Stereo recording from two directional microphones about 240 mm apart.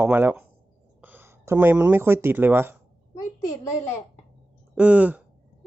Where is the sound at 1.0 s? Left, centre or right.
Centre.